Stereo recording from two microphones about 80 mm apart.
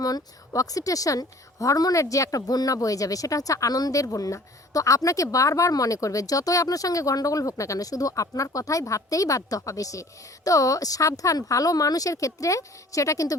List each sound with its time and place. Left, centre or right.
0.0 s speech: left